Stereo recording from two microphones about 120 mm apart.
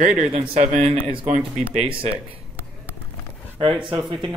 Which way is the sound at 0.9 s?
50° right (ahead or behind).